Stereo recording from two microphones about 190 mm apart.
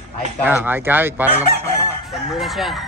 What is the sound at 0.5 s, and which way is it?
Speech, 10° right (ahead or behind).